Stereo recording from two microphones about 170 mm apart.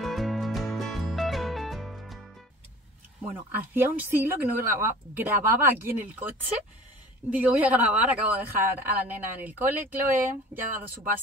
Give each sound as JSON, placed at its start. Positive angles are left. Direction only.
{"t": 0.0, "sound": "music", "side_deg": 0}
{"t": 3.3, "sound": "speech", "side_deg": -10}
{"t": 7.2, "sound": "speech", "side_deg": -10}